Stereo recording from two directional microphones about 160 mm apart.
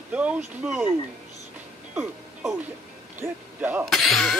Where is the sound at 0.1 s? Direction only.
10° right (ahead or behind).